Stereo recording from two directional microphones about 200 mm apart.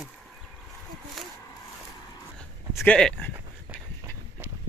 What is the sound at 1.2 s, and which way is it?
Speech, centre (ahead or behind).